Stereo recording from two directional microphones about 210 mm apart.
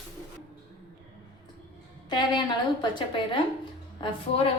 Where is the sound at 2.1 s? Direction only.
20° left (ahead or behind).